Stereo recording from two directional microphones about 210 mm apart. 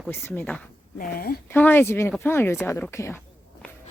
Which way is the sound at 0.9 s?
45° left (ahead or behind).